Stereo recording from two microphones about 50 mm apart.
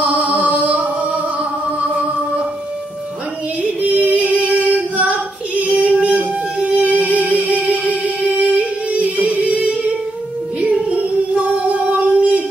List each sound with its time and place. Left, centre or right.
0.0 s music: right
3.8 s female singing: right
9.1 s music: right
10.6 s child singing: right
12.0 s music: right